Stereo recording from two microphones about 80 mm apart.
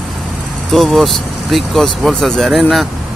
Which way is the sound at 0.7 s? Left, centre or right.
Centre.